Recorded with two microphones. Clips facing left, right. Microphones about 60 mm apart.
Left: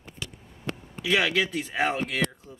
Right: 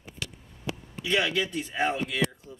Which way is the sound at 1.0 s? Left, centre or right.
Left.